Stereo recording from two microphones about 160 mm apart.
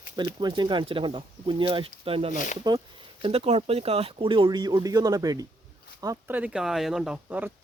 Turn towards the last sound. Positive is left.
turn(degrees=-5)  # may be behind; listen again after turning